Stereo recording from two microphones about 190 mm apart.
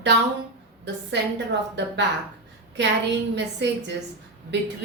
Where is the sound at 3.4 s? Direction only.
65° right (ahead or behind).